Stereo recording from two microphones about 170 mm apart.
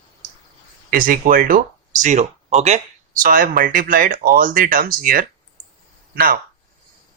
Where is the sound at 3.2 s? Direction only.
55° right (ahead or behind).